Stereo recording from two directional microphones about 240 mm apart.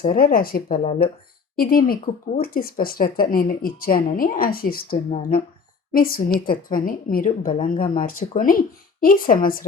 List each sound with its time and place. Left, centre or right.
0.1 s speech: left